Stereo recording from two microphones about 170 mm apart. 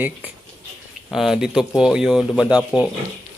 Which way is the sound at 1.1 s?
Centre (ahead or behind).